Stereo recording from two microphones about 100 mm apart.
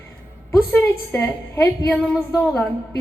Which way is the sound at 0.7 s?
15° left (ahead or behind).